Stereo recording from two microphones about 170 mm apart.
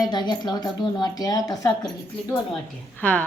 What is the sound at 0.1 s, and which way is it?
A woman's voice, 25° left (ahead or behind).